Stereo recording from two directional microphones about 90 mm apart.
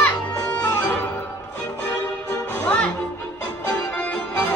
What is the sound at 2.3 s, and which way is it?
Music, 20° left (ahead or behind).